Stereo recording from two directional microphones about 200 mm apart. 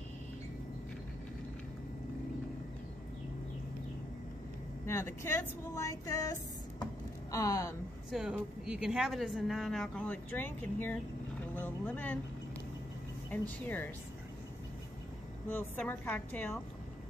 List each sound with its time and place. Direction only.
4.8 s speech: 15° left (ahead or behind)
8.1 s speech: 5° right (ahead or behind)
11.5 s vehicle: 10° left (ahead or behind)
13.3 s speech: 10° left (ahead or behind)
15.4 s speech: 10° left (ahead or behind)